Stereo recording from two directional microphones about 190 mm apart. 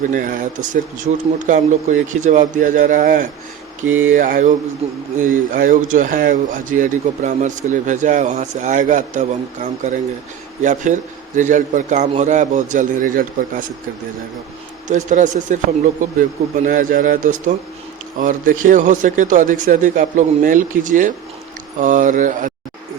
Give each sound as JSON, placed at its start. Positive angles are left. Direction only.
{"t": 0.1, "sound": "speech", "side_deg": -45}
{"t": 4.8, "sound": "speech", "side_deg": -30}
{"t": 5.2, "sound": "speech", "side_deg": -45}
{"t": 14.8, "sound": "speech", "side_deg": -40}